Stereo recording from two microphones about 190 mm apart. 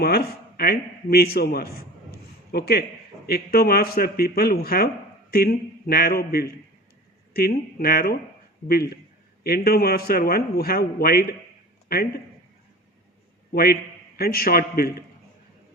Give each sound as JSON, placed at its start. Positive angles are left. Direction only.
{"t": 0.0, "sound": "a man's voice", "side_deg": 55}
{"t": 7.8, "sound": "a man's voice", "side_deg": 50}
{"t": 13.5, "sound": "a man's voice", "side_deg": 55}